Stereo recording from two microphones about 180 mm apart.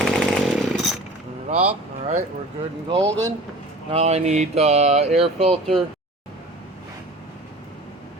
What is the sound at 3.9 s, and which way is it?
Speech, 35° right (ahead or behind).